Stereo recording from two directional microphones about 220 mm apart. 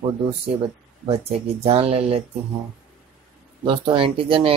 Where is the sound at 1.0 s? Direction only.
25° right (ahead or behind).